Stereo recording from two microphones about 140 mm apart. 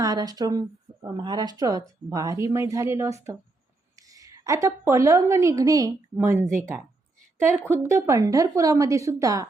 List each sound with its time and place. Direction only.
0.0 s a woman's voice: 25° right (ahead or behind)
7.6 s speech: 15° right (ahead or behind)